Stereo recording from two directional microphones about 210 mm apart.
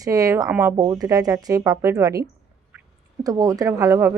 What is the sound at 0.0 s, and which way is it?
Speech, 15° right (ahead or behind).